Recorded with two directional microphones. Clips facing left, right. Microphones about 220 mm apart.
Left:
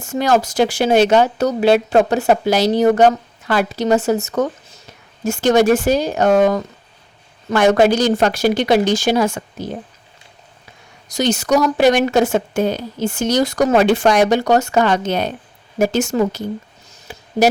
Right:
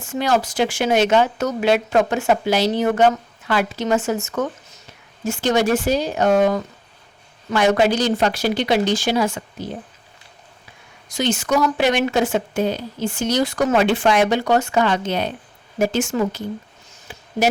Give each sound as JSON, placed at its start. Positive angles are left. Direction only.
{"t": 0.0, "sound": "speech", "side_deg": 45}
{"t": 11.1, "sound": "speech", "side_deg": 40}